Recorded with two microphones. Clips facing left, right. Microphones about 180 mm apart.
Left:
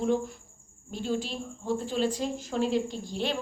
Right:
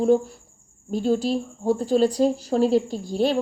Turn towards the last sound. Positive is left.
turn(degrees=-40)  # may be behind; listen again after turning